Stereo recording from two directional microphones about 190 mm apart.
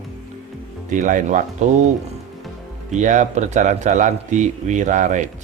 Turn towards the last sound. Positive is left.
turn(degrees=-40)  # may be behind; listen again after turning